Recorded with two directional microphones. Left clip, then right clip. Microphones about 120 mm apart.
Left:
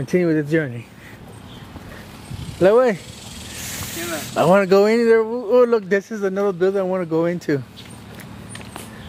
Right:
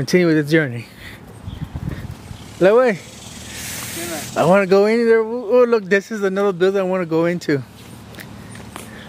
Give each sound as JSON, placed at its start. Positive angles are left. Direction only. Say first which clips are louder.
{"t": 0.0, "sound": "speech", "louder": "right 3 dB", "side_deg": -25}
{"t": 2.6, "sound": "speech", "louder": "right 1 dB", "side_deg": -5}
{"t": 4.4, "sound": "speech", "louder": "right 1 dB", "side_deg": 0}